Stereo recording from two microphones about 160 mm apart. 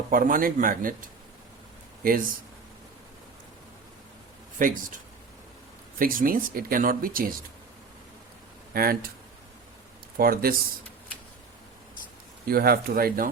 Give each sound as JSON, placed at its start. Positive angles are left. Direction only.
{"t": 0.1, "sound": "speech", "side_deg": -60}
{"t": 4.5, "sound": "speech", "side_deg": -55}
{"t": 6.0, "sound": "speech", "side_deg": -60}
{"t": 8.7, "sound": "speech", "side_deg": -70}
{"t": 10.2, "sound": "speech", "side_deg": -65}
{"t": 12.5, "sound": "speech", "side_deg": -70}